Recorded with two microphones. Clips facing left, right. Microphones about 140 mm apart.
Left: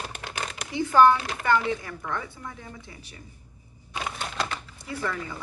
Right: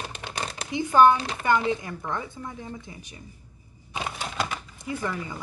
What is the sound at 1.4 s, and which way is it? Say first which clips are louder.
A woman's voice: right 1 dB; 20° right (ahead or behind).